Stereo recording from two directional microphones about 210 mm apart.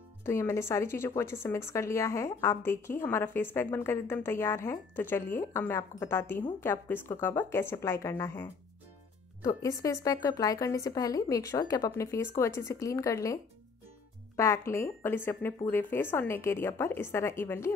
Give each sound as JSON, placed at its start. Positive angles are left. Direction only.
{"t": 0.2, "sound": "a woman's voice", "side_deg": 15}